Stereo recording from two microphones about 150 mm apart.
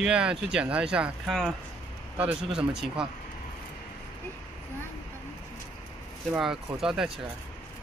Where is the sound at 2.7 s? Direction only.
5° right (ahead or behind).